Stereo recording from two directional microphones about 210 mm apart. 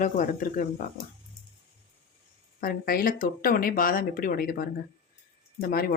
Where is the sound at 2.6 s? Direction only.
45° left (ahead or behind).